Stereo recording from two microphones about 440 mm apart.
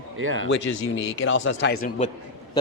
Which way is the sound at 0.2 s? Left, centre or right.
Right.